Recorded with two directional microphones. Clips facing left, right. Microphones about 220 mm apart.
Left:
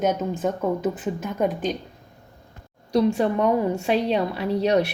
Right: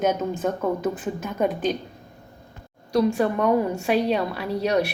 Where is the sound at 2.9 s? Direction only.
25° left (ahead or behind).